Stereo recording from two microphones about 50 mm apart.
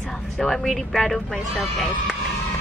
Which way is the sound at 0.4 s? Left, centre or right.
Centre.